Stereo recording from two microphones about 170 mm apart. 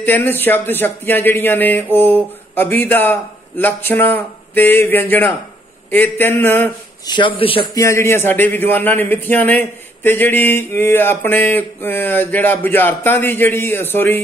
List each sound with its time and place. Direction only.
0.0 s speech: 10° left (ahead or behind)
7.1 s a man's voice: 30° left (ahead or behind)
7.7 s speech: 15° left (ahead or behind)